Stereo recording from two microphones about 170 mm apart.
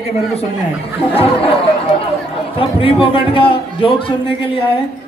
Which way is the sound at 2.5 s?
30° left (ahead or behind).